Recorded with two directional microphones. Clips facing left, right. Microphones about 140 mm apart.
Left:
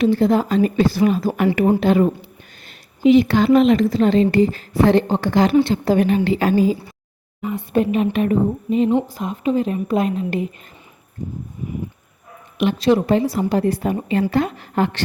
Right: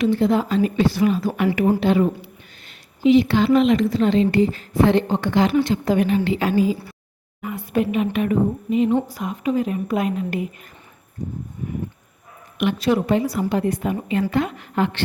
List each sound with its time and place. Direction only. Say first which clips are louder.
0.0 s a woman's voice: left 2 dB; 40° left (ahead or behind)
7.4 s a woman's voice: left 5 dB; 25° left (ahead or behind)
7.8 s a woman's voice: left 2 dB; 35° left (ahead or behind)
12.5 s a woman's voice: left 3 dB; 30° left (ahead or behind)